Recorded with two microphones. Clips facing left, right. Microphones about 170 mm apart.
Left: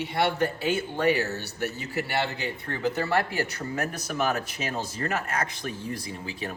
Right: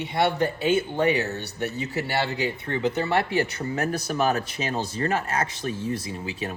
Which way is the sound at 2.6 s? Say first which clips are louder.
Even; 20° right (ahead or behind).